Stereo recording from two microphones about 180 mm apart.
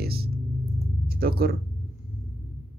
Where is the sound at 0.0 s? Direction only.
60° right (ahead or behind).